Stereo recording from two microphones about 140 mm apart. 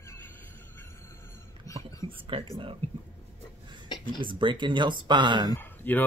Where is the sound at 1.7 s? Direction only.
25° left (ahead or behind).